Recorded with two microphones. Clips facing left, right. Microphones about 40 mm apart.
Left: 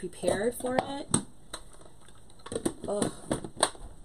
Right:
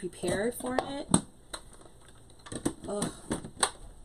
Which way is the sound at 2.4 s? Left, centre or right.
Centre.